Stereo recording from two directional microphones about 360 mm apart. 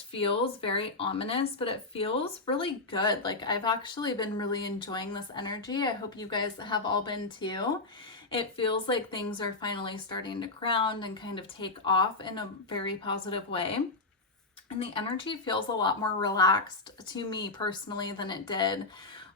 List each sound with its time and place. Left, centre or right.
0.1 s speech: centre